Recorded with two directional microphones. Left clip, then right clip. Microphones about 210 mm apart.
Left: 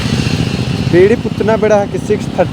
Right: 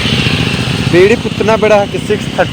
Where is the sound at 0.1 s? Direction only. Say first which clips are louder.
Right 5 dB; 30° left (ahead or behind).